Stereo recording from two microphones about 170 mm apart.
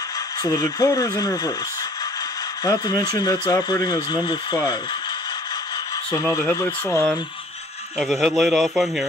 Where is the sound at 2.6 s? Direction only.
25° left (ahead or behind).